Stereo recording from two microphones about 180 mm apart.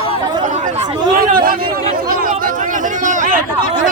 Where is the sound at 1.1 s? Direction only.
55° right (ahead or behind).